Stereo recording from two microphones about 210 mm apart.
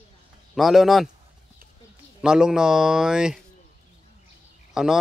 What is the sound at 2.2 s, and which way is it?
Speech, 5° right (ahead or behind).